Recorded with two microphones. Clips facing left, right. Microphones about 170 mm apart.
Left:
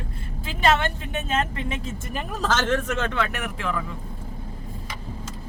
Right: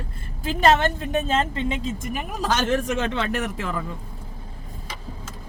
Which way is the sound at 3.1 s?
30° right (ahead or behind).